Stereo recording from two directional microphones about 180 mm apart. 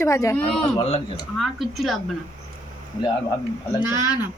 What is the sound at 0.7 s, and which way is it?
Speech, 30° left (ahead or behind).